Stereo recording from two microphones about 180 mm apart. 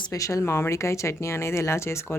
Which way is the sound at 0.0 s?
20° left (ahead or behind).